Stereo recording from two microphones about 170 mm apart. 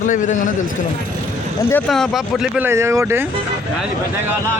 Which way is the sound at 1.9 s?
Centre (ahead or behind).